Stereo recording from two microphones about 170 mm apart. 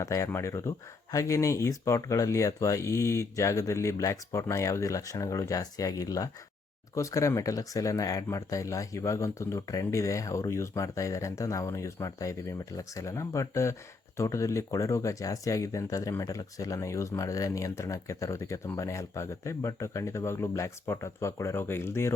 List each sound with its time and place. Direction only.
0.0 s speech: 15° left (ahead or behind)